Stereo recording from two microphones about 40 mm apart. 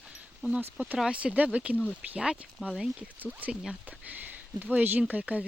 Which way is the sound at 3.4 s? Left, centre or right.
Right.